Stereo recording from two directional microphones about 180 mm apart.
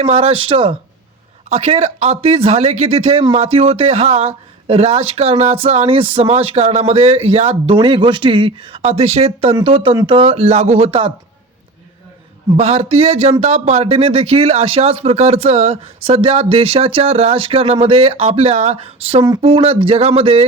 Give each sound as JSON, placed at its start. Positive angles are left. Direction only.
{"t": 0.0, "sound": "speech", "side_deg": -35}
{"t": 12.5, "sound": "speech", "side_deg": -35}